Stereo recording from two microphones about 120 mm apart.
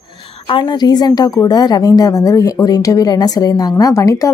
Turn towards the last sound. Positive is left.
turn(degrees=25)  # may be behind; listen again after turning